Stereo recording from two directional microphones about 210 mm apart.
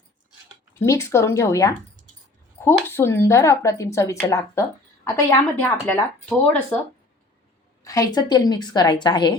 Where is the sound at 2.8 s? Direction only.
10° left (ahead or behind).